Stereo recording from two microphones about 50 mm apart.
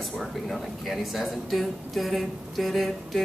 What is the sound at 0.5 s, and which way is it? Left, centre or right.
Speech, centre.